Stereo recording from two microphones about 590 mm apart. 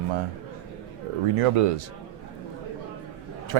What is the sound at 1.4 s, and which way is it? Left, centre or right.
Speech, right.